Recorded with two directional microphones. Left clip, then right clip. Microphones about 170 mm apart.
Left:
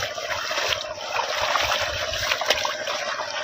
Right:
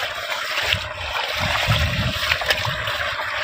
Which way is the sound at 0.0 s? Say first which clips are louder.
Right 2 dB; centre (ahead or behind).